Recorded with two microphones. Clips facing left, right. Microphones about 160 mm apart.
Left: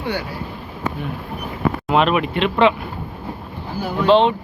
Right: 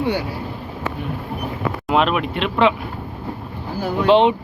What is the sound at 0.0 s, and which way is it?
Speech, 30° right (ahead or behind).